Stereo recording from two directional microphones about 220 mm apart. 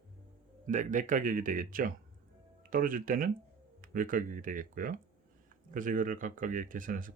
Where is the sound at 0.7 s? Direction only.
35° right (ahead or behind).